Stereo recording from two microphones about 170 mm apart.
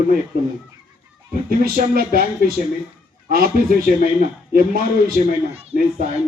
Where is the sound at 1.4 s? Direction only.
60° right (ahead or behind).